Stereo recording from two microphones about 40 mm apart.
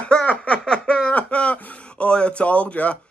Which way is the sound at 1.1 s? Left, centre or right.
Left.